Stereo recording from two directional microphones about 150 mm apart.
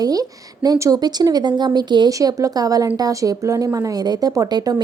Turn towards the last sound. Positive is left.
turn(degrees=-25)  # may be behind; listen again after turning